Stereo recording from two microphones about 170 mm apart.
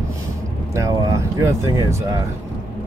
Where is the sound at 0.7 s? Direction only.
20° right (ahead or behind).